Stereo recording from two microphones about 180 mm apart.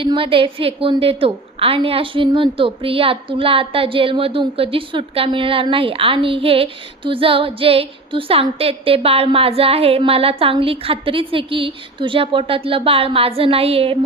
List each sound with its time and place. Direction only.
0.0 s a woman's voice: 30° right (ahead or behind)